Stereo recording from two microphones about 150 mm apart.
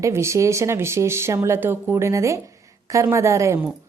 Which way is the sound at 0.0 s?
20° right (ahead or behind).